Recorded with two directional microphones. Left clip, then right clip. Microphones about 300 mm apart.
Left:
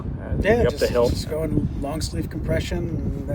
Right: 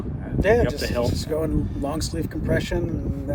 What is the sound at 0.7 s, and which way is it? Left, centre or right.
Speech, centre.